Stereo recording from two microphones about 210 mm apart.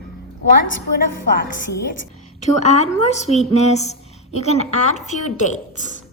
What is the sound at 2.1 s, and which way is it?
A woman's voice, 35° left (ahead or behind).